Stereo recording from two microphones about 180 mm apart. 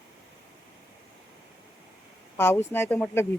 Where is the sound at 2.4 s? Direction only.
10° left (ahead or behind).